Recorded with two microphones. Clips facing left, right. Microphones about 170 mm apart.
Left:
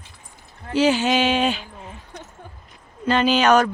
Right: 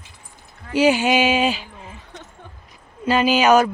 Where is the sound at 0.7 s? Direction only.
10° right (ahead or behind).